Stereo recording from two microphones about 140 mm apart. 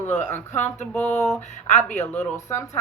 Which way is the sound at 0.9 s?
10° left (ahead or behind).